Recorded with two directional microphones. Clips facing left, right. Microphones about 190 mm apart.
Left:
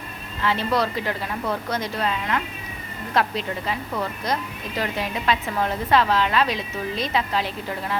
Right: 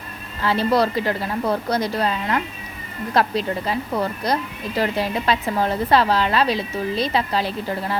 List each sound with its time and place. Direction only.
0.4 s a woman's voice: 35° right (ahead or behind)